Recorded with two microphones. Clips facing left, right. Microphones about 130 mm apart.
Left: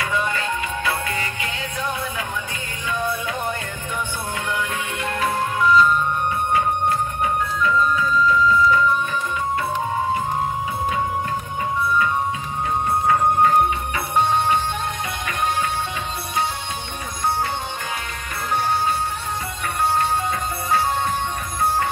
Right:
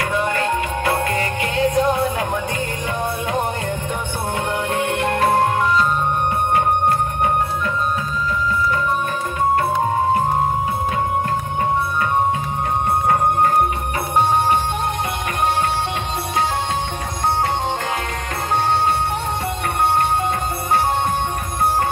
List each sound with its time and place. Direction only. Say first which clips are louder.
0.0 s music: right 4 dB; 55° right (ahead or behind)
4.5 s music: right 5 dB; 60° right (ahead or behind)
14.1 s music: right 2 dB; 50° right (ahead or behind)